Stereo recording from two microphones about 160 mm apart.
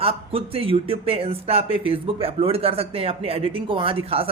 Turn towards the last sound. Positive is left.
turn(degrees=-35)  # may be behind; listen again after turning